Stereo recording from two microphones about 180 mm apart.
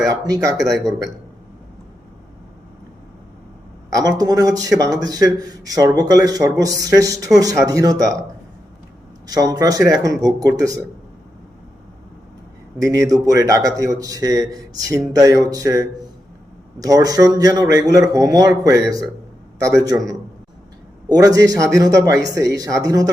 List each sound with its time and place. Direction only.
0.0 s speech: 20° right (ahead or behind)
3.8 s a man's voice: 20° right (ahead or behind)
9.2 s speech: 20° right (ahead or behind)
12.8 s a man's voice: 20° right (ahead or behind)
21.1 s speech: 20° right (ahead or behind)